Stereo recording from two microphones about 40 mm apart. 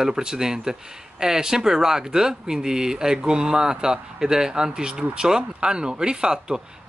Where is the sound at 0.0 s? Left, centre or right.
Centre.